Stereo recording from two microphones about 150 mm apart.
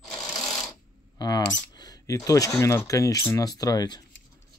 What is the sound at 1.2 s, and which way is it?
Speech, 25° left (ahead or behind).